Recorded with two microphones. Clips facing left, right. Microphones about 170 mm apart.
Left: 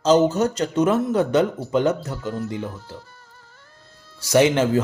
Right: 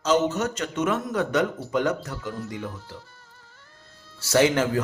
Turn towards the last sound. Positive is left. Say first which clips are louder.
# left 4 dB
turn(degrees=20)  # may be behind; listen again after turning